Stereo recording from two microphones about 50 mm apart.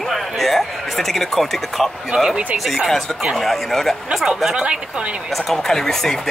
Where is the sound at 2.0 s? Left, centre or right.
Centre.